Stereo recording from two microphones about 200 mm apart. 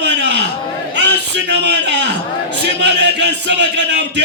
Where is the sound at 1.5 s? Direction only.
60° right (ahead or behind).